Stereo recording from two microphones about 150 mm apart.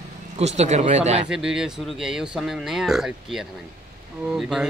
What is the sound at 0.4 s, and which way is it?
Speech, 50° right (ahead or behind).